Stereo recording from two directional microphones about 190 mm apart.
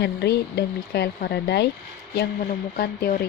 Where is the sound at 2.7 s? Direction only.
55° left (ahead or behind).